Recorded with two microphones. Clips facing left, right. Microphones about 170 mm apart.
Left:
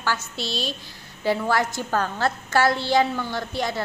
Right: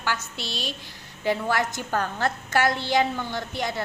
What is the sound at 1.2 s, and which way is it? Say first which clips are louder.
A woman's voice: left 2 dB; 20° right (ahead or behind).